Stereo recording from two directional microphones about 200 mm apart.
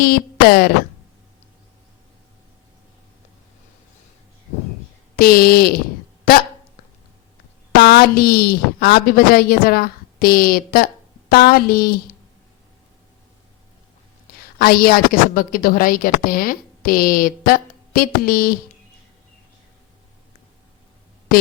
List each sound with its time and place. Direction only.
0.0 s speech: 50° left (ahead or behind)
5.1 s a woman's voice: 50° left (ahead or behind)
7.8 s a woman's voice: 55° left (ahead or behind)
14.6 s a woman's voice: 50° left (ahead or behind)